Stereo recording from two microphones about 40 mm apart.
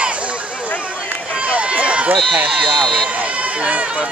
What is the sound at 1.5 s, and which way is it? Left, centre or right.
Run, right.